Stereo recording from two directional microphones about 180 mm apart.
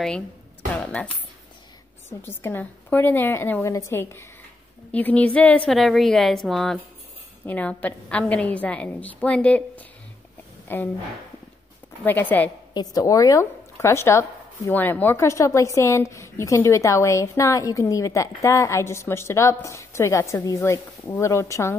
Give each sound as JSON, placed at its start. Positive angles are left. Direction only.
{"t": 2.0, "sound": "a woman's voice", "side_deg": 10}
{"t": 12.0, "sound": "speech", "side_deg": 10}